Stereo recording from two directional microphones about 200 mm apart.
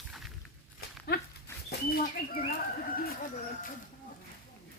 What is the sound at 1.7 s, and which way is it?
Speech, 50° left (ahead or behind).